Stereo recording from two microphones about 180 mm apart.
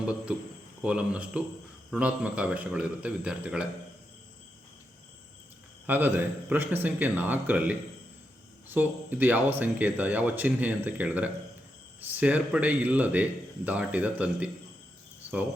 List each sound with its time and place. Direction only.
0.0 s speech: 5° right (ahead or behind)
5.8 s speech: 10° right (ahead or behind)